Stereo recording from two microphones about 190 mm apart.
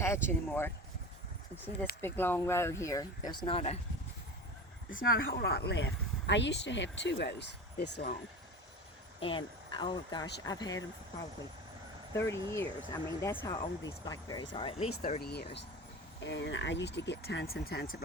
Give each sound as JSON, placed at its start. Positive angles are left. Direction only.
{"t": 0.0, "sound": "speech", "side_deg": 15}
{"t": 2.0, "sound": "speech", "side_deg": 10}
{"t": 4.9, "sound": "speech", "side_deg": 50}
{"t": 9.2, "sound": "speech", "side_deg": 25}
{"t": 12.1, "sound": "speech", "side_deg": 15}
{"t": 15.2, "sound": "speech", "side_deg": 60}
{"t": 16.2, "sound": "speech", "side_deg": 70}